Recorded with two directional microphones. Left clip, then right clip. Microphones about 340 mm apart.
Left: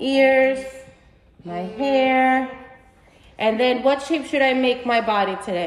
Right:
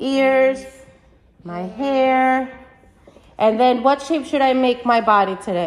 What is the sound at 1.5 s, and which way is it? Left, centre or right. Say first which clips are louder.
A woman's voice: even; centre.